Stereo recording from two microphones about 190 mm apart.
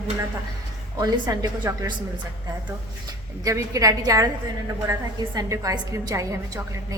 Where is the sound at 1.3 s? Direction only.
20° right (ahead or behind).